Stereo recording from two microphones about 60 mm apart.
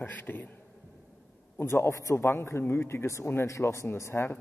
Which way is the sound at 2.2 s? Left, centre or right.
Left.